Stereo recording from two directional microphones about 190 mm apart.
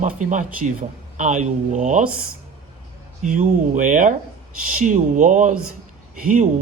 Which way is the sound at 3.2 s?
40° right (ahead or behind).